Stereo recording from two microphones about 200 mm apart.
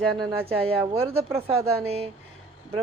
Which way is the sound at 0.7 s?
30° right (ahead or behind).